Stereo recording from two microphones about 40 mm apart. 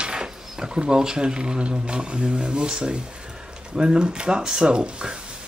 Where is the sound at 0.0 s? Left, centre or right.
Centre.